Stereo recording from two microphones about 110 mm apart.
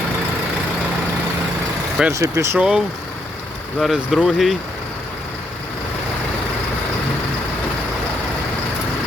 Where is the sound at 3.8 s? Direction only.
Centre (ahead or behind).